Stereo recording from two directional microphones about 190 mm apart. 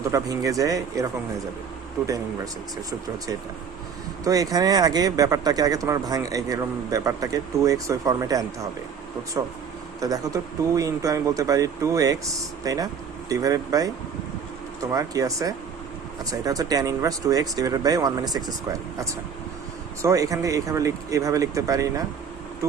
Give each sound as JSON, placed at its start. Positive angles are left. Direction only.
{"t": 0.1, "sound": "speech", "side_deg": -15}
{"t": 2.0, "sound": "speech", "side_deg": -20}
{"t": 4.2, "sound": "speech", "side_deg": -20}